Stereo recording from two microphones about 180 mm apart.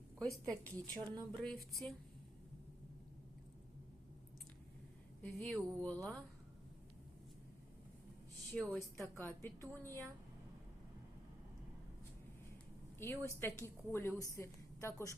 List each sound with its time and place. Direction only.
0.3 s a woman's voice: 15° right (ahead or behind)
0.6 s a woman's voice: 10° left (ahead or behind)
0.9 s speech: 20° right (ahead or behind)
1.4 s a sound: centre (ahead or behind)
5.2 s a woman's voice: 10° left (ahead or behind)
8.5 s a woman's voice: 10° left (ahead or behind)
13.0 s a woman's voice: 10° left (ahead or behind)